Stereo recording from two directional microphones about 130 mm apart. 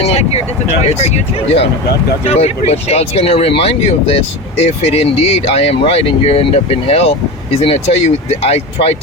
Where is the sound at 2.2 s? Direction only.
55° left (ahead or behind).